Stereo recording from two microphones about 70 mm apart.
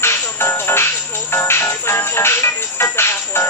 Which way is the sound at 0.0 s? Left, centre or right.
Left.